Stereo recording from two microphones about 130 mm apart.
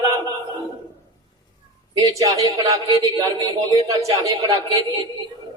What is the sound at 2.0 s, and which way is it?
Speech, 25° right (ahead or behind).